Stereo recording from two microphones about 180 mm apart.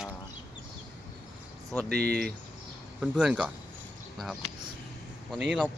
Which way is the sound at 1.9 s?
60° right (ahead or behind).